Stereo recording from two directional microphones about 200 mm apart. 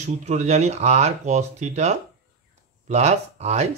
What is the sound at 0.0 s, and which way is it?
Speech, 35° right (ahead or behind).